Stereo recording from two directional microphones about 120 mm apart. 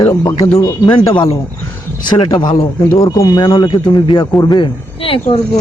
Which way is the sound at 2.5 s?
55° left (ahead or behind).